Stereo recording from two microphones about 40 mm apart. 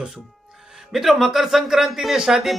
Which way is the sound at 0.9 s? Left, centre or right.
Centre.